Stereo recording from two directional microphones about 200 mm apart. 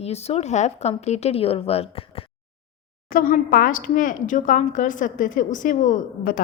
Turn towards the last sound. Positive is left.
turn(degrees=45)  # may be behind; listen again after turning